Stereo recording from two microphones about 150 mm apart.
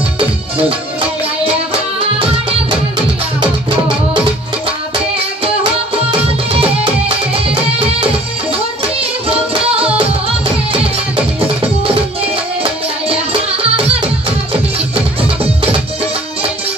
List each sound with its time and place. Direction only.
1.4 s music: 35° right (ahead or behind)
6.2 s music: 40° right (ahead or behind)
9.3 s music: 40° right (ahead or behind)